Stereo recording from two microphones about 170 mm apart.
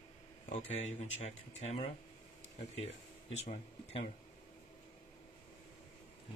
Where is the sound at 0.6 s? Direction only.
40° left (ahead or behind).